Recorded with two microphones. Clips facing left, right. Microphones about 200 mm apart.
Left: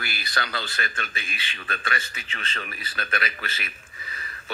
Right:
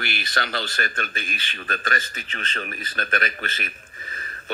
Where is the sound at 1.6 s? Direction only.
40° right (ahead or behind).